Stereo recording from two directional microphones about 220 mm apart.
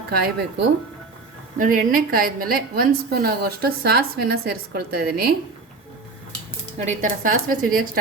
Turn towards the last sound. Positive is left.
turn(degrees=-40)  # may be behind; listen again after turning